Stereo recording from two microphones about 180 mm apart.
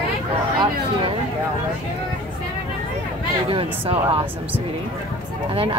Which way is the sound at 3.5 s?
30° right (ahead or behind).